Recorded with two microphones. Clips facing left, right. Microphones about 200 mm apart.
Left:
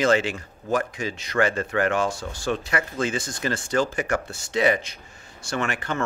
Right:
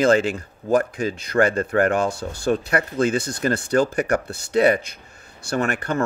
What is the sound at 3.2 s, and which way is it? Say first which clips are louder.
Speech: right 5 dB; 60° right (ahead or behind).